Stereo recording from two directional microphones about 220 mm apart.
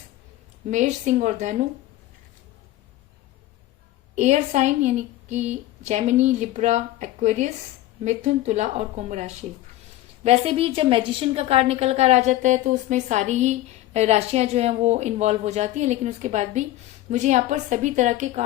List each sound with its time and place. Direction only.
0.7 s a woman's voice: 30° right (ahead or behind)
4.1 s a woman's voice: 30° right (ahead or behind)